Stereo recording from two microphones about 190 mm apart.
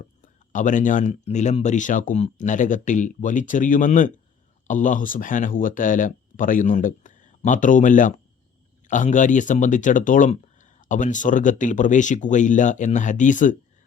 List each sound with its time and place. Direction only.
0.5 s speech: 40° left (ahead or behind)